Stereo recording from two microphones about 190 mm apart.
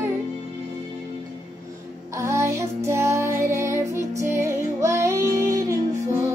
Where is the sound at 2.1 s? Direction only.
15° right (ahead or behind).